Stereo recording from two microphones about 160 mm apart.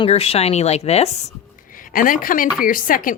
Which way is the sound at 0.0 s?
40° left (ahead or behind).